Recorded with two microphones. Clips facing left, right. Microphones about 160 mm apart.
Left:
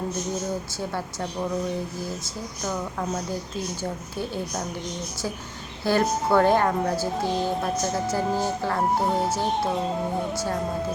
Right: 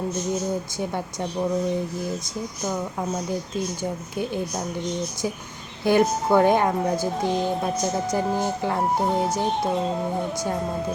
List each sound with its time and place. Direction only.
0.8 s speech: 15° right (ahead or behind)
5.8 s a woman's voice: 15° right (ahead or behind)
8.8 s speech: centre (ahead or behind)